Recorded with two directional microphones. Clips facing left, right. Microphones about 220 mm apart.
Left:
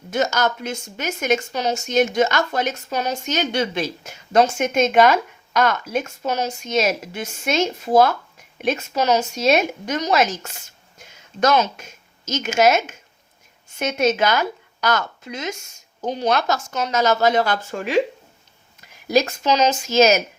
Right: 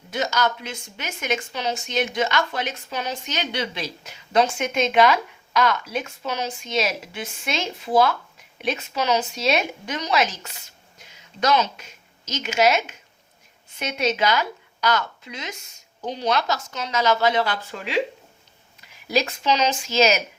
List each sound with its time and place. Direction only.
0.1 s a woman's voice: 45° left (ahead or behind)
19.0 s speech: 45° left (ahead or behind)